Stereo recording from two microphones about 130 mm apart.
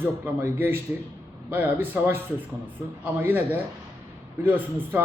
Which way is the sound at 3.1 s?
15° right (ahead or behind).